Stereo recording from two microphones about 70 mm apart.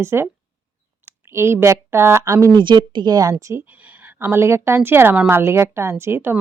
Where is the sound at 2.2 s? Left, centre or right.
Right.